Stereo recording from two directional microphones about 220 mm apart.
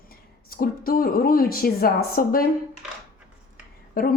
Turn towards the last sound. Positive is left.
turn(degrees=40)  # may be behind; listen again after turning